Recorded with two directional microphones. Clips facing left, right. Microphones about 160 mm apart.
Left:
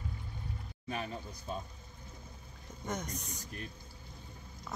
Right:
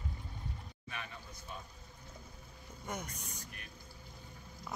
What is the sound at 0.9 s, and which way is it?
Speech, 35° left (ahead or behind).